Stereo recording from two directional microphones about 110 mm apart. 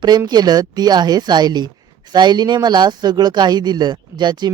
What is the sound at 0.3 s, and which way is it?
Speech, 40° right (ahead or behind).